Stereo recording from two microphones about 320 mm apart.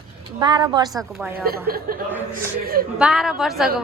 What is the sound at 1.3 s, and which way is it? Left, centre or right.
A woman's voice, right.